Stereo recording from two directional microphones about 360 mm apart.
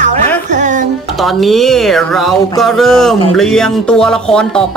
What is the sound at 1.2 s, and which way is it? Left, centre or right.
Speech, centre.